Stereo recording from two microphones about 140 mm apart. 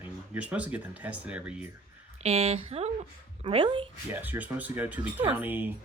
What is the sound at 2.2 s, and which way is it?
Speech, 45° right (ahead or behind).